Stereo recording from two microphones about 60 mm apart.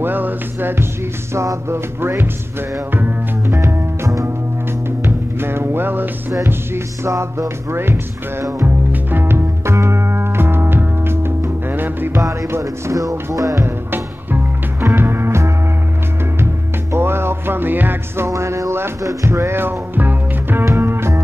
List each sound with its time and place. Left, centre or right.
0.0 s music: right
1.3 s music: right
2.0 s speech: right
3.4 s music: right
5.0 s music: right
7.1 s music: right
12.4 s music: right
13.3 s music: right
13.6 s music: right
16.9 s music: right
18.3 s music: right
20.6 s music: right